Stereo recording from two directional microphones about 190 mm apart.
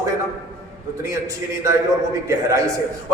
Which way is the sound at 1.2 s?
15° right (ahead or behind).